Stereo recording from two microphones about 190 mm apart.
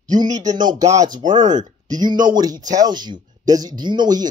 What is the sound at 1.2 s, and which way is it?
Speech, 40° right (ahead or behind).